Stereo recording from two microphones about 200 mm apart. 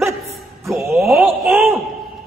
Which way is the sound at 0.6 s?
Centre (ahead or behind).